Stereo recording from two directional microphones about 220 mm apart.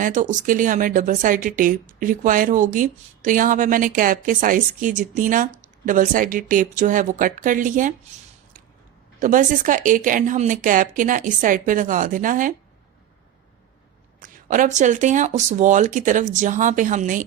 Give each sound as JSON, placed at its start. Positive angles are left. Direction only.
{"t": 0.0, "sound": "speech", "side_deg": -35}
{"t": 9.2, "sound": "speech", "side_deg": -35}
{"t": 14.2, "sound": "speech", "side_deg": -35}